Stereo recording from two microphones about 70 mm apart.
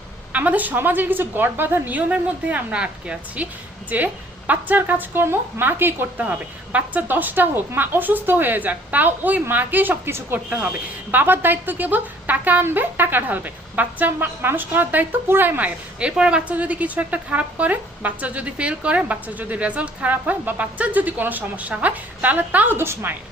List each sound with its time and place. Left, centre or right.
0.3 s a woman's voice: right
10.3 s speech: right